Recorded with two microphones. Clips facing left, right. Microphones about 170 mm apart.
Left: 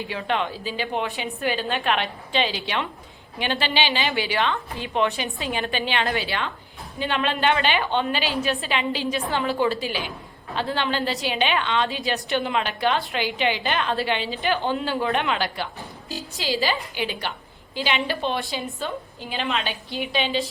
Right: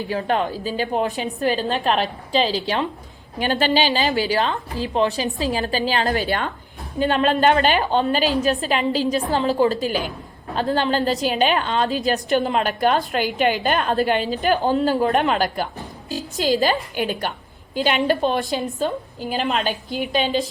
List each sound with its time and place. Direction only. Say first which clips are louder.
0.1 s a woman's voice: right 5 dB; 40° right (ahead or behind)